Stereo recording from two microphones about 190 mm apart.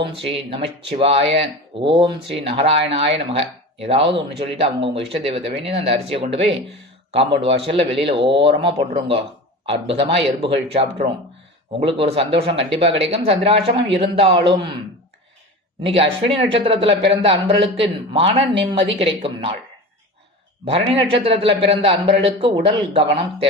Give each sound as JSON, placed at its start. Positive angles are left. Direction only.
{"t": 0.0, "sound": "speech", "side_deg": -30}
{"t": 15.8, "sound": "speech", "side_deg": -30}
{"t": 20.7, "sound": "speech", "side_deg": -30}